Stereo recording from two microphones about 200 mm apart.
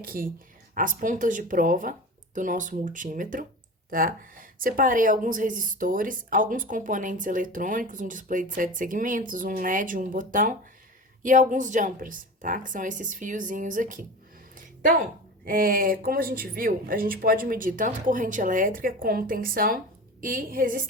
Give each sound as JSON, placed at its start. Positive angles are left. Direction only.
{"t": 0.0, "sound": "speech", "side_deg": -45}
{"t": 15.4, "sound": "speech", "side_deg": -45}